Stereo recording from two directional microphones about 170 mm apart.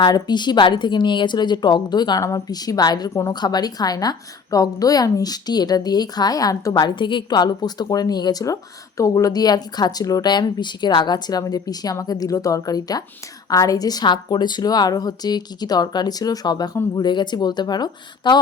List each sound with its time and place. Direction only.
0.0 s a woman's voice: 25° left (ahead or behind)